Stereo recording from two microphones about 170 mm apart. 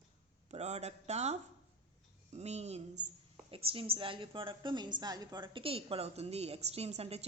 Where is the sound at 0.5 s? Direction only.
40° right (ahead or behind).